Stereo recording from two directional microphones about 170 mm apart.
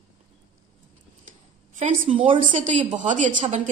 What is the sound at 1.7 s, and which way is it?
Speech, 45° right (ahead or behind).